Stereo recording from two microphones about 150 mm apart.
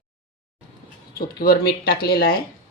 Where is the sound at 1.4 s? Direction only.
90° left.